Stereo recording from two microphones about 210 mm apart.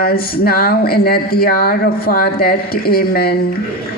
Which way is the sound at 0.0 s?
45° left (ahead or behind).